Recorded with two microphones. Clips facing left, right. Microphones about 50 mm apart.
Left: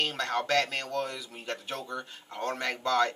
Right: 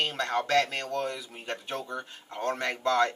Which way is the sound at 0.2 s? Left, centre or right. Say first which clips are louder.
Right 3 dB; centre.